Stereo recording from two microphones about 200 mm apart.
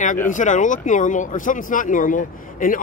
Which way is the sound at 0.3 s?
40° left (ahead or behind).